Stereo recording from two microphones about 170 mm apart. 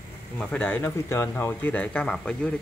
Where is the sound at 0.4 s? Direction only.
10° left (ahead or behind).